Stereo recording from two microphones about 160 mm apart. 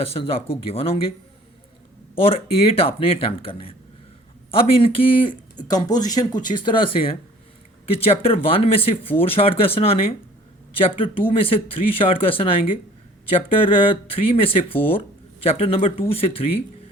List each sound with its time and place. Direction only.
0.0 s speech: 35° left (ahead or behind)
2.1 s speech: 35° left (ahead or behind)